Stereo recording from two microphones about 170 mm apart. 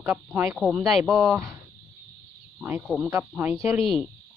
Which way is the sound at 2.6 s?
15° right (ahead or behind).